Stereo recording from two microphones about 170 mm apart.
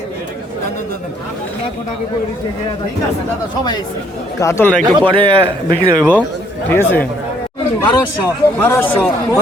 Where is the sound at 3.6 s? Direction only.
25° left (ahead or behind).